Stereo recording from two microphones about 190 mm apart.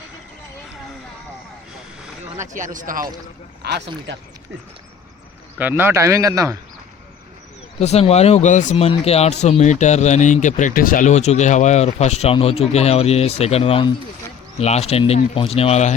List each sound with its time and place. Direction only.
2.4 s speech: 40° right (ahead or behind)
3.6 s speech: 60° right (ahead or behind)
5.5 s a man's voice: 10° right (ahead or behind)
7.8 s speech: 35° left (ahead or behind)